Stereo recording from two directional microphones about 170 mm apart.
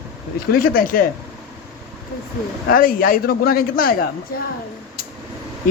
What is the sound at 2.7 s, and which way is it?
A man's voice, 60° left (ahead or behind).